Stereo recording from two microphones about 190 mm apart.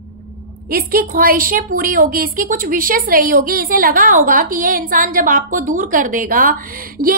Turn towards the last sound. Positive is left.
turn(degrees=-45)  # may be behind; listen again after turning